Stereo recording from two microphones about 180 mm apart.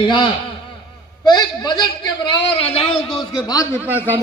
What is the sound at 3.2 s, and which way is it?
Speech, 25° left (ahead or behind).